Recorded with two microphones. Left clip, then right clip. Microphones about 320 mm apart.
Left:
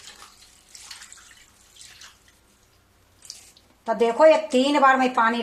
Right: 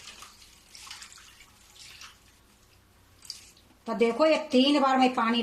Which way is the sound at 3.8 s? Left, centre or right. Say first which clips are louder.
Left 7 dB; left.